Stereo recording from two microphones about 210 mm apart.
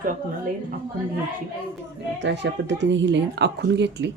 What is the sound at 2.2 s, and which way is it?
Speech, 55° right (ahead or behind).